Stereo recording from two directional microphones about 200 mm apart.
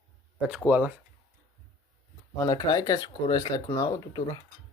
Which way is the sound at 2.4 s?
20° left (ahead or behind).